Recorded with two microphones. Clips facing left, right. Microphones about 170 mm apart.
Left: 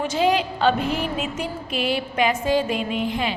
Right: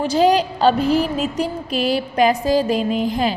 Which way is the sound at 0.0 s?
35° right (ahead or behind).